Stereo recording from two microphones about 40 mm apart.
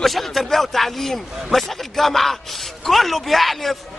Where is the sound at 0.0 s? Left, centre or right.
Centre.